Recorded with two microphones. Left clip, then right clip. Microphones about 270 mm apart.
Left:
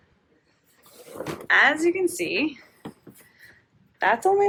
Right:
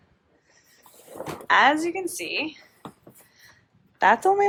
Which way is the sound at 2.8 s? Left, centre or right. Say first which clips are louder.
Left 1 dB; centre.